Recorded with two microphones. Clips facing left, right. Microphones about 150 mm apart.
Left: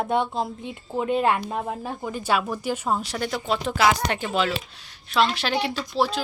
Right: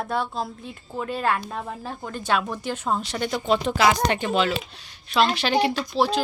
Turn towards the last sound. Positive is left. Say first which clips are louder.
# right 2 dB
turn(degrees=5)  # may be behind; listen again after turning